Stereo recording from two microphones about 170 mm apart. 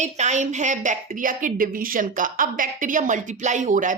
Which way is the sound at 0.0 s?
45° right (ahead or behind).